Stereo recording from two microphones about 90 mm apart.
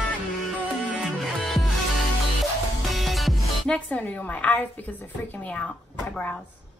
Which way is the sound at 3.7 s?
15° left (ahead or behind).